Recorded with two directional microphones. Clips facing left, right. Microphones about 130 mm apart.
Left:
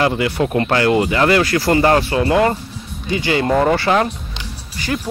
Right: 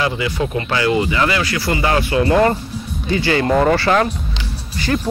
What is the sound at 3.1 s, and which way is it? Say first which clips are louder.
Speech: right 1 dB; 20° left (ahead or behind).